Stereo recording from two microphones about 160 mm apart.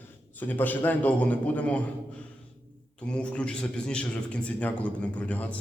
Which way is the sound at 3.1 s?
5° left (ahead or behind).